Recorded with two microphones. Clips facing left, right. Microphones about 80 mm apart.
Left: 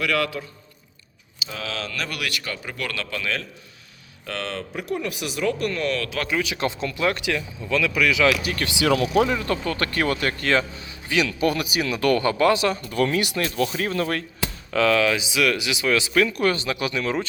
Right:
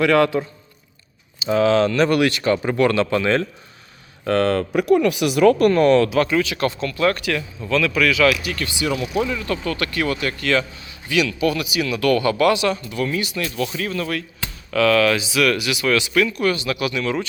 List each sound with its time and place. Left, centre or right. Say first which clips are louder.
0.0 s speech: right 8 dB; right
4.3 s speech: right 12 dB; right
4.7 s speech: right 11 dB; right
6.4 s speech: right 3 dB; centre
8.3 s a man's voice: right 1 dB; left
8.6 s speech: left 4 dB; left
9.3 s a man's voice: even; left
11.3 s a man's voice: right 2 dB; left
12.8 s speech: left 1 dB; left
13.4 s a man's voice: even; left
14.7 s a man's voice: right 3 dB; centre